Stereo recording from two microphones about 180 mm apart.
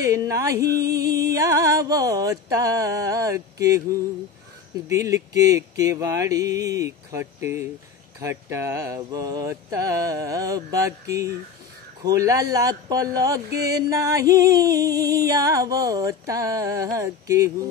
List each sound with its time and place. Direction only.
0.0 s mantra: 20° right (ahead or behind)
0.7 s music: 65° right (ahead or behind)
1.2 s mantra: 20° right (ahead or behind)
4.8 s mantra: 15° right (ahead or behind)
12.0 s music: 20° right (ahead or behind)
15.1 s mantra: 20° right (ahead or behind)